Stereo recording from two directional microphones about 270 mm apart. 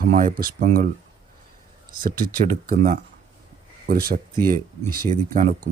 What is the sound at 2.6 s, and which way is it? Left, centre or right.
Speech, right.